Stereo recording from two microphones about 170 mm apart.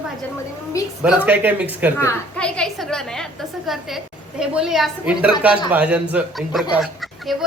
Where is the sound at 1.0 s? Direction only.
10° right (ahead or behind).